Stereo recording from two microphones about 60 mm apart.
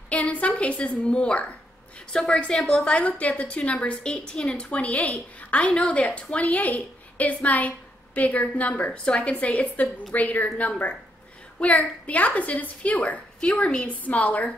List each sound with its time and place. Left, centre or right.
0.1 s a woman's voice: left